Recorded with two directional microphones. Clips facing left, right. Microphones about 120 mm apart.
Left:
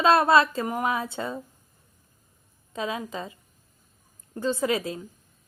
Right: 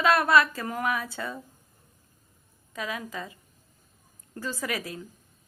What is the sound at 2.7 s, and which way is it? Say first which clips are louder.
A woman's voice: left 4 dB; 25° left (ahead or behind).